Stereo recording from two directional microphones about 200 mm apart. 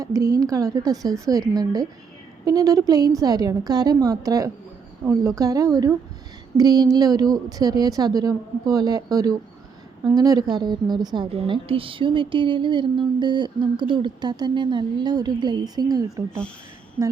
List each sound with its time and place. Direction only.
0.0 s a woman's voice: 15° right (ahead or behind)